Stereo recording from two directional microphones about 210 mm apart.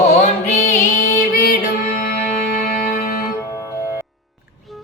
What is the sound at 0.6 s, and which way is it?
Female singing, 40° left (ahead or behind).